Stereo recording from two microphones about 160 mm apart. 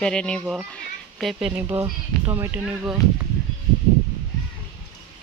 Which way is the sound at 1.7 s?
30° right (ahead or behind).